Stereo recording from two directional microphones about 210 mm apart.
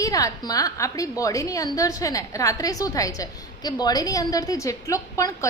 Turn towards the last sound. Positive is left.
turn(degrees=15)  # may be behind; listen again after turning